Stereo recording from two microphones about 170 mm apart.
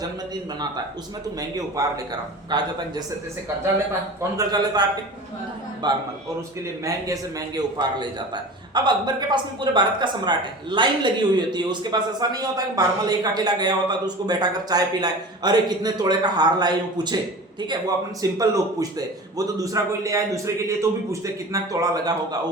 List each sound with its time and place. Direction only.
1.4 s speech: 20° right (ahead or behind)
4.2 s speech: 20° right (ahead or behind)